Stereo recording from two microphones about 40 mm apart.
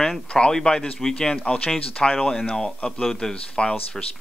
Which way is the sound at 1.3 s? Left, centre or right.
Left.